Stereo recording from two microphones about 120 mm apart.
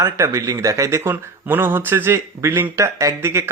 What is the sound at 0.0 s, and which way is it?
Speech, 25° right (ahead or behind).